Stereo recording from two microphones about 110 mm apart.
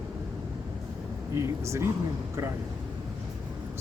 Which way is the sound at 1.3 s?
25° right (ahead or behind).